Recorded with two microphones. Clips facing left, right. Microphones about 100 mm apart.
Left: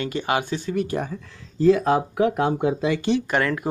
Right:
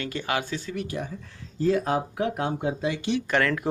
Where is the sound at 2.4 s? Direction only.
90° left.